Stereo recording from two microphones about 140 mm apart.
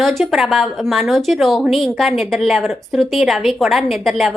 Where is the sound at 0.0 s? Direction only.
Centre (ahead or behind).